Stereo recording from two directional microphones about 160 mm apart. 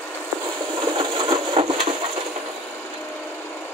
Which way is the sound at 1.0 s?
35° right (ahead or behind).